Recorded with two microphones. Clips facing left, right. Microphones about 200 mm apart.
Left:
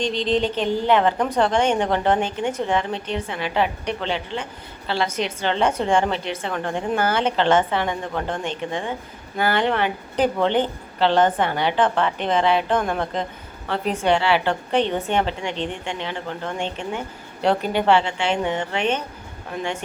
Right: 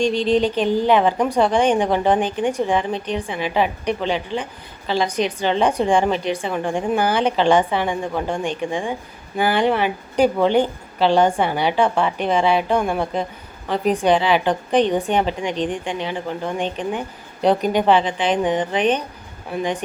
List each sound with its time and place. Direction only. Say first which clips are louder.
0.0 s a woman's voice: right 4 dB; 10° right (ahead or behind)